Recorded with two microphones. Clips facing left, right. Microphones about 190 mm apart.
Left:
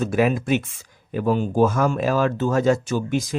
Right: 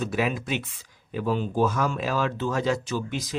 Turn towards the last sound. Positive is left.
turn(degrees=50)  # may be behind; listen again after turning